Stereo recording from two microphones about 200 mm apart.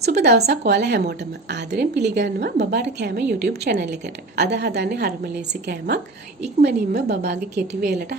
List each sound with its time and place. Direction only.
0.0 s a woman's voice: 55° right (ahead or behind)